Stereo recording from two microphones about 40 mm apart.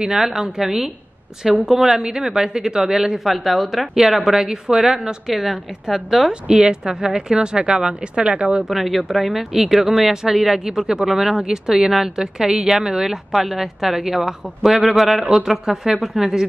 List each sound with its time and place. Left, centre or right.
0.0 s speech: centre
6.4 s speech: centre
8.6 s speech: centre